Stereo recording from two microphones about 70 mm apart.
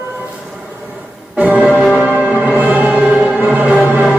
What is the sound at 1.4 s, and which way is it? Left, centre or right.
Music, centre.